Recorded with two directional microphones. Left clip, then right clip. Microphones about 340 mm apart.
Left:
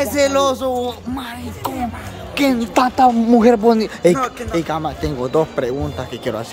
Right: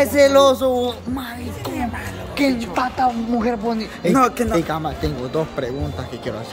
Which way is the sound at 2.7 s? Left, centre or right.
Left.